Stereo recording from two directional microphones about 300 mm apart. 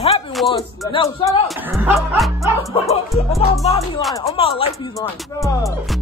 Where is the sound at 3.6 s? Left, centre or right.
Left.